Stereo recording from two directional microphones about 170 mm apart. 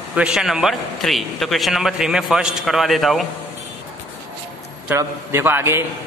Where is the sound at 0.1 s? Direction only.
5° right (ahead or behind).